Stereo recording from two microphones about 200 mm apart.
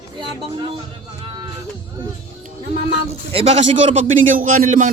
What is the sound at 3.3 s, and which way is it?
Speech, 30° right (ahead or behind).